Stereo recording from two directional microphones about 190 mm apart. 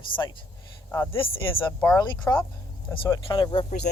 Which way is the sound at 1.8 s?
15° left (ahead or behind).